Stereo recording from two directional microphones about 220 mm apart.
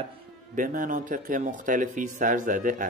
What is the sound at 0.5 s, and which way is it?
Speech, 40° right (ahead or behind).